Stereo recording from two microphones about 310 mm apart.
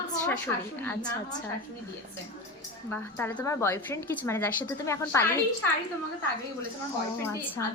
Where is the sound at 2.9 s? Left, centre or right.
Centre.